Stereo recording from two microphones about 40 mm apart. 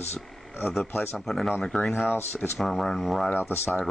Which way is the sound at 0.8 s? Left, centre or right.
Left.